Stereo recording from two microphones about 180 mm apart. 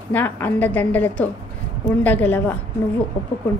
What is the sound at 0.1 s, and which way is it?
A woman's voice, 10° left (ahead or behind).